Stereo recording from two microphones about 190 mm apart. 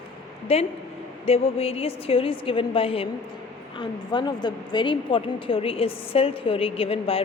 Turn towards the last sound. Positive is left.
turn(degrees=30)  # may be behind; listen again after turning